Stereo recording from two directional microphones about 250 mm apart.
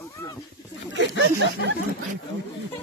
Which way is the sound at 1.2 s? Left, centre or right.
Right.